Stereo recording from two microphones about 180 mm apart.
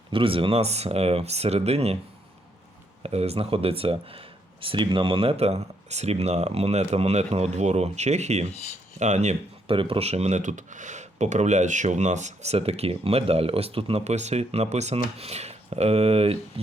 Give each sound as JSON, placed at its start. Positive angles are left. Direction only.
{"t": 0.1, "sound": "speech", "side_deg": -30}
{"t": 3.0, "sound": "speech", "side_deg": -35}